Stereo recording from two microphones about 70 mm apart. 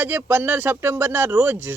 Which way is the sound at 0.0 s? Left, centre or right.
Right.